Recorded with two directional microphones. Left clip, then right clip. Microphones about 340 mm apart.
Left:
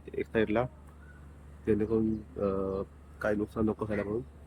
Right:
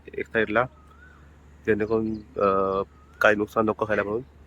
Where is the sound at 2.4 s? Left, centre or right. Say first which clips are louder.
Right 10 dB; right.